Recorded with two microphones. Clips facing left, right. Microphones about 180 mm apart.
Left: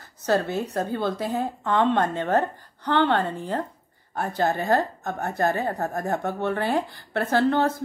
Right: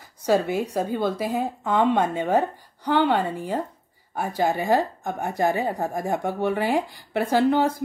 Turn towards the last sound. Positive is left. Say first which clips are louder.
# right 1 dB
turn(degrees=-10)  # may be behind; listen again after turning